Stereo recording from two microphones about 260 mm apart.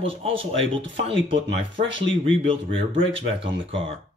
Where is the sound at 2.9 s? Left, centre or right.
Right.